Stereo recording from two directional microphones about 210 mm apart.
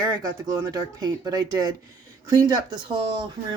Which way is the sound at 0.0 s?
15° right (ahead or behind).